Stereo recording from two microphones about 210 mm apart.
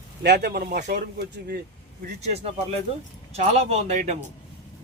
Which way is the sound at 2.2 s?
30° right (ahead or behind).